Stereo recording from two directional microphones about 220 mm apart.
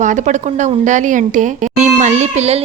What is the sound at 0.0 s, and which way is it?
A woman's voice, 35° right (ahead or behind).